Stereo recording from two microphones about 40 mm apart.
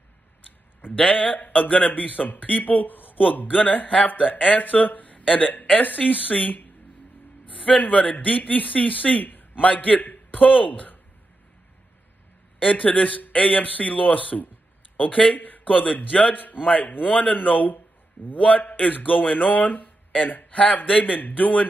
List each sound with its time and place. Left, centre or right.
1.0 s a man's voice: left
12.5 s a man's voice: left
15.3 s a man's voice: left